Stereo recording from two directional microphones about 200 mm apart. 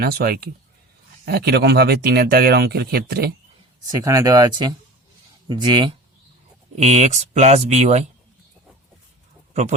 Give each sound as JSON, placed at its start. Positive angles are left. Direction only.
{"t": 0.0, "sound": "speech", "side_deg": -50}
{"t": 3.8, "sound": "speech", "side_deg": -15}
{"t": 6.7, "sound": "speech", "side_deg": -35}